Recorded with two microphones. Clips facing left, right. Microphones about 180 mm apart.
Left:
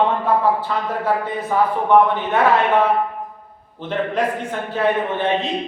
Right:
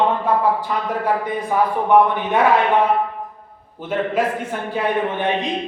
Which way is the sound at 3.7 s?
10° right (ahead or behind).